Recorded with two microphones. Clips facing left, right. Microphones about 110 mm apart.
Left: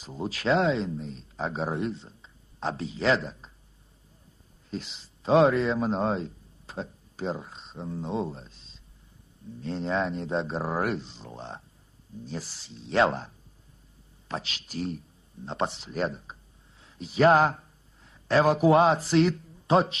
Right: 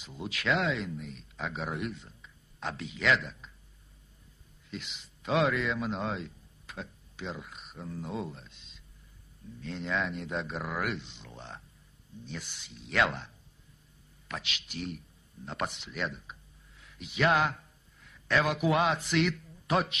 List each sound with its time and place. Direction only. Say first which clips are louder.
0.0 s speech: left 5 dB; 35° left (ahead or behind)
4.6 s a man's voice: left 6 dB; 35° left (ahead or behind)